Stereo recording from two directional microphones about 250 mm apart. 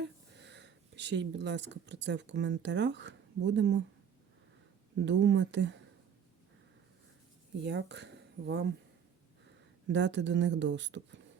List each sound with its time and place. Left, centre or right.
0.0 s speech: right
5.0 s speech: right
7.6 s speech: right
9.8 s speech: right